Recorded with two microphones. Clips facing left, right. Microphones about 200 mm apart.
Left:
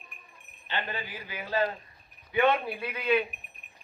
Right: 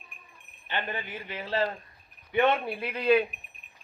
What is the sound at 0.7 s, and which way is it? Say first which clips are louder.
Speech: right 1 dB; 20° right (ahead or behind).